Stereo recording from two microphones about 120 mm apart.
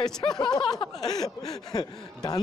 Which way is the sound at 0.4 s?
40° left (ahead or behind).